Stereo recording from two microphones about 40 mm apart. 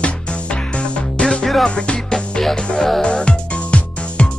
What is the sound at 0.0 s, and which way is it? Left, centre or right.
Music, left.